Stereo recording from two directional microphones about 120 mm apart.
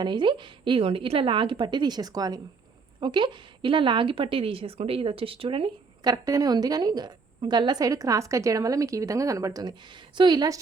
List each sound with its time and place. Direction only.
0.0 s a woman's voice: 40° right (ahead or behind)